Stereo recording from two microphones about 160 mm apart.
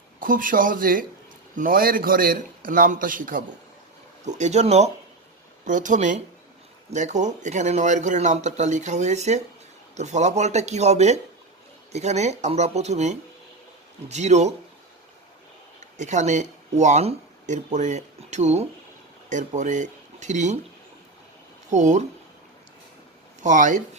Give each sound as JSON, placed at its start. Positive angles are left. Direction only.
{"t": 0.2, "sound": "a man's voice", "side_deg": -60}
{"t": 4.3, "sound": "a man's voice", "side_deg": -45}
{"t": 15.8, "sound": "speech", "side_deg": -50}
{"t": 21.7, "sound": "a man's voice", "side_deg": -50}
{"t": 23.4, "sound": "a man's voice", "side_deg": -50}